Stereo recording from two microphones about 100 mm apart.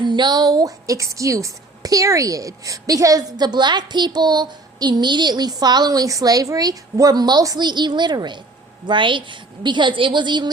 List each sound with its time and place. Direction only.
0.0 s a woman's voice: 45° right (ahead or behind)